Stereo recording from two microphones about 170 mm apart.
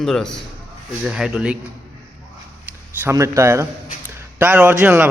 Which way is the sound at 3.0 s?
15° right (ahead or behind).